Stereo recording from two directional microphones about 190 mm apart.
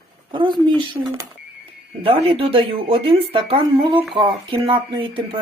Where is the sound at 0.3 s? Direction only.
25° right (ahead or behind).